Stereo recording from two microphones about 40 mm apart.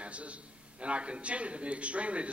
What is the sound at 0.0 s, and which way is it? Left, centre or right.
A man's voice, right.